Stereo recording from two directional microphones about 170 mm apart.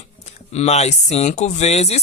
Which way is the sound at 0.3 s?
40° left (ahead or behind).